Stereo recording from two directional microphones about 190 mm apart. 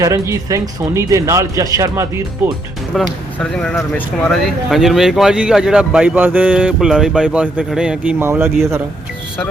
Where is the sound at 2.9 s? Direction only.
5° left (ahead or behind); by 8.8 s 15° right (ahead or behind).